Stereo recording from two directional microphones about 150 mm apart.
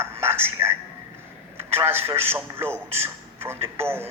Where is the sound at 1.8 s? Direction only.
15° right (ahead or behind).